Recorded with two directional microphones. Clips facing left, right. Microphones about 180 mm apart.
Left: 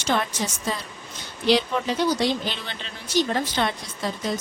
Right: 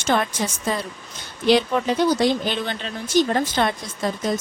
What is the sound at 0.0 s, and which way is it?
Speech, 50° right (ahead or behind).